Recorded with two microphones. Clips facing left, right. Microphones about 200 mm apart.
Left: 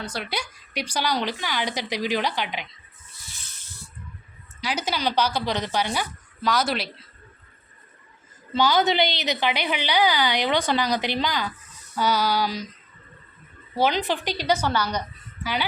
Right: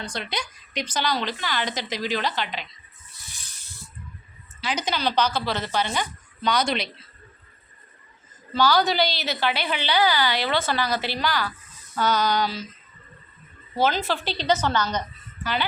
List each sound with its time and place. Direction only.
0.0 s a woman's voice: 5° left (ahead or behind)
4.6 s a woman's voice: 10° left (ahead or behind)
8.5 s a woman's voice: 20° left (ahead or behind)
13.7 s a woman's voice: 15° left (ahead or behind)